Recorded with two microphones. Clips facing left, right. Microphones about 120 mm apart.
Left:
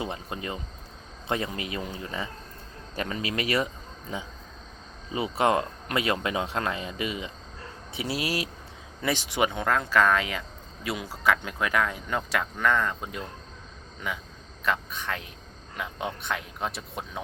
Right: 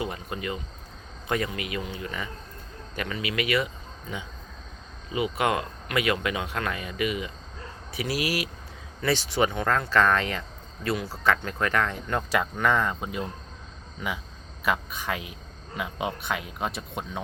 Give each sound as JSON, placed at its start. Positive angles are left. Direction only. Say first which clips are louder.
{"t": 0.0, "sound": "a man's voice", "louder": "right 1 dB", "side_deg": 25}
{"t": 5.1, "sound": "speech", "louder": "left 1 dB", "side_deg": 30}
{"t": 9.0, "sound": "speech", "louder": "right 2 dB", "side_deg": 15}
{"t": 14.6, "sound": "speech", "louder": "right 1 dB", "side_deg": -10}